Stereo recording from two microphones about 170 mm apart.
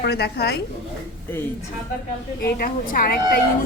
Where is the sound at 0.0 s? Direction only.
75° left (ahead or behind).